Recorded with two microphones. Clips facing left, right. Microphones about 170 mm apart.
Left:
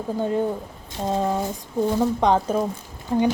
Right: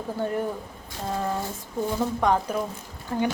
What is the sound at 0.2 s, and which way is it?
A woman's voice, 20° left (ahead or behind).